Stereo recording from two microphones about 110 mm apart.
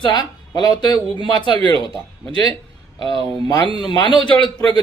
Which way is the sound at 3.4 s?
35° left (ahead or behind).